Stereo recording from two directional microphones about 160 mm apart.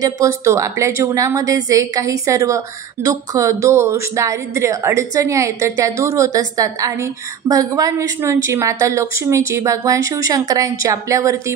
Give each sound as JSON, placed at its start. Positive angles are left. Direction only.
{"t": 0.0, "sound": "a woman's voice", "side_deg": -20}